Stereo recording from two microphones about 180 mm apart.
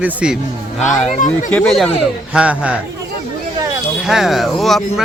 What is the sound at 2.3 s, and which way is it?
Speech, 5° right (ahead or behind).